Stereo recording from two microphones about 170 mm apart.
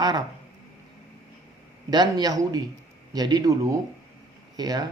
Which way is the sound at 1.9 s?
25° right (ahead or behind).